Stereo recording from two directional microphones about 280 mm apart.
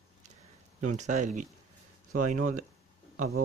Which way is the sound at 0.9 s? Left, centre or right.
Right.